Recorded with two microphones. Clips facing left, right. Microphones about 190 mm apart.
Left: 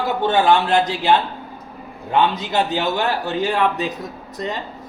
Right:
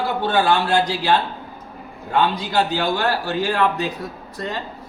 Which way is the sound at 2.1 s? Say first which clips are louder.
Left 1 dB; 20° left (ahead or behind).